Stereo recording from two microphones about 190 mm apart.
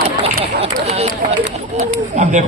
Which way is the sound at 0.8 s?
35° right (ahead or behind).